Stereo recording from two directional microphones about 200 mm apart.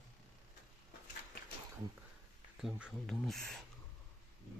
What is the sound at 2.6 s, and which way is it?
Speech, 5° right (ahead or behind).